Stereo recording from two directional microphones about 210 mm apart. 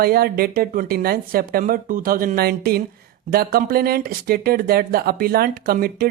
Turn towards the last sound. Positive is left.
turn(degrees=-45)  # may be behind; listen again after turning